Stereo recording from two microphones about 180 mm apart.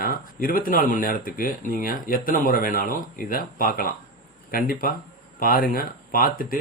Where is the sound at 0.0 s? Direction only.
50° left (ahead or behind).